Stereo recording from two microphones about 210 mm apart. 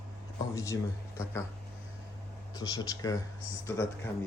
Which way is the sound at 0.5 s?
15° left (ahead or behind).